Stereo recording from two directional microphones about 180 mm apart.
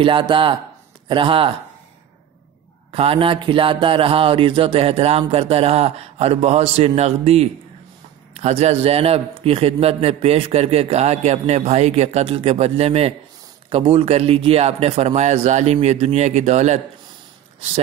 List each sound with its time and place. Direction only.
0.0 s speech: 25° right (ahead or behind)
2.9 s a man's voice: 30° right (ahead or behind)